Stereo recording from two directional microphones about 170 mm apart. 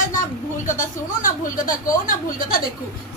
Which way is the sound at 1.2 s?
50° left (ahead or behind).